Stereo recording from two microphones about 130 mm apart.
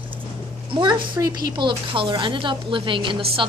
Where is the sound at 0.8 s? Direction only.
35° right (ahead or behind).